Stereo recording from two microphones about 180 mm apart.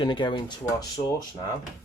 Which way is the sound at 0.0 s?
25° left (ahead or behind).